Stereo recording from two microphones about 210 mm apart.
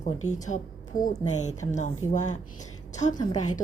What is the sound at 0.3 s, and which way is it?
Speech, 35° left (ahead or behind).